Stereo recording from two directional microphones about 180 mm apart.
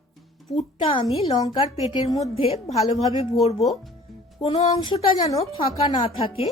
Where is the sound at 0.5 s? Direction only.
30° left (ahead or behind).